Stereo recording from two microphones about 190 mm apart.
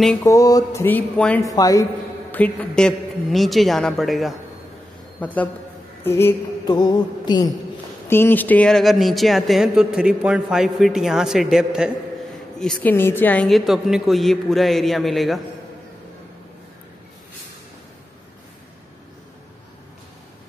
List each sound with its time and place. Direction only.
0.2 s speech: 20° left (ahead or behind)
1.5 s speech: 20° left (ahead or behind)
2.3 s a woman's voice: 5° left (ahead or behind)
8.1 s speech: 10° left (ahead or behind)